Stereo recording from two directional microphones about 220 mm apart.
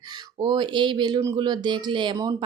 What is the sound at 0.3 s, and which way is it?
Speech, 20° right (ahead or behind).